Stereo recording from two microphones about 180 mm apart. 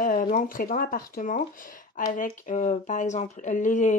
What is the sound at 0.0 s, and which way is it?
Speech, 50° left (ahead or behind).